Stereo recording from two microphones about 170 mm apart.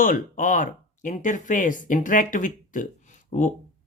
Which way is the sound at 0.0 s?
55° left (ahead or behind).